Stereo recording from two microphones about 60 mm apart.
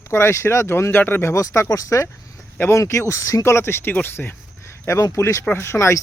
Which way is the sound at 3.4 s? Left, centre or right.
Left.